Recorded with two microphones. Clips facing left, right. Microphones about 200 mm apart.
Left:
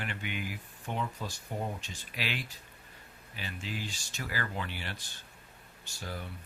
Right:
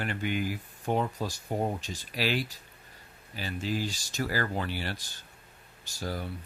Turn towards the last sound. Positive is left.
turn(degrees=-40)  # may be behind; listen again after turning